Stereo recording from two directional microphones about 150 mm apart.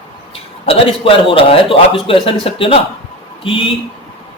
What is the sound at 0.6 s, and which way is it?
Speech, 40° left (ahead or behind).